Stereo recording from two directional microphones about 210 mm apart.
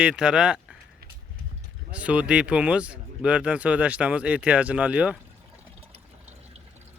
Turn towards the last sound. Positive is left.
turn(degrees=-5)  # may be behind; listen again after turning